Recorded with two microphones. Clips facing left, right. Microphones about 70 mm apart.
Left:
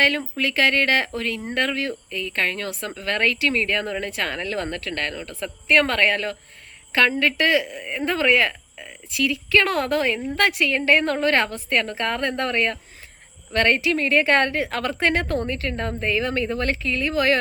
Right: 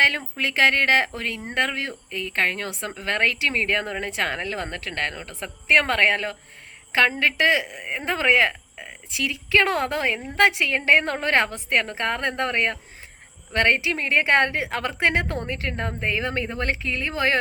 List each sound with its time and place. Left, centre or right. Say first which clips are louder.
0.0 s speech: left 1 dB; right